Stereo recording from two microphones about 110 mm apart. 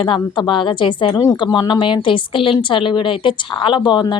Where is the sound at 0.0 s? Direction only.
45° left (ahead or behind).